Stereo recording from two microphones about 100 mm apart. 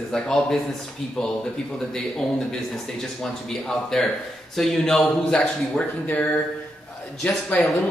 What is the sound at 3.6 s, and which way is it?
A woman's voice, 5° left (ahead or behind).